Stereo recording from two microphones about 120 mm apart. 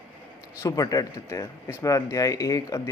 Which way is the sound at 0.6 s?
30° left (ahead or behind).